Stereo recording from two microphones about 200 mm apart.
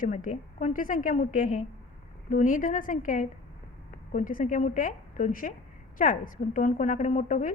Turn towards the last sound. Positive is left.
turn(degrees=40)  # may be behind; listen again after turning